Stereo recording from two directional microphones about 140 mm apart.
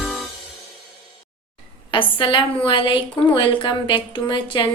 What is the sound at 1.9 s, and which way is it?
A woman's voice, 40° left (ahead or behind).